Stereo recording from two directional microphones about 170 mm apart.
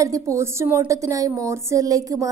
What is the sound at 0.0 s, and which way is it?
A woman's voice, 20° right (ahead or behind).